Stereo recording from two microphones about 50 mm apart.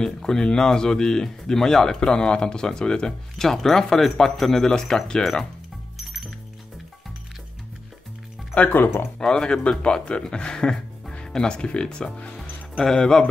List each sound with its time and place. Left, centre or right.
0.0 s speech: centre
8.5 s speech: left
9.2 s speech: centre